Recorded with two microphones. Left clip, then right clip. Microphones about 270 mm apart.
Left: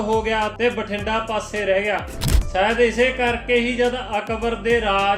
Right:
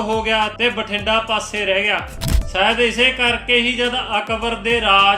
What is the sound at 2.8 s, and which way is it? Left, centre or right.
Speech, centre.